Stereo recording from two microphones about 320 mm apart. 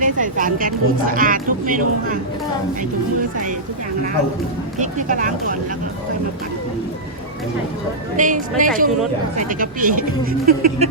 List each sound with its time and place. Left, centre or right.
0.0 s speech: right
4.8 s speech: right
8.1 s speech: right